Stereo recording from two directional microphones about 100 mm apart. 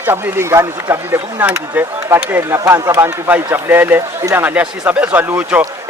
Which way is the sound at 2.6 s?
35° right (ahead or behind).